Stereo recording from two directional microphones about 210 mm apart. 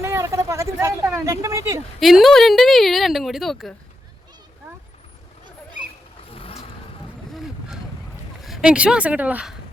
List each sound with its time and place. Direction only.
0.0 s speech: 15° right (ahead or behind)
2.0 s speech: centre (ahead or behind)
6.3 s vehicle: 25° left (ahead or behind)
7.3 s a sound: centre (ahead or behind)
8.4 s speech: centre (ahead or behind)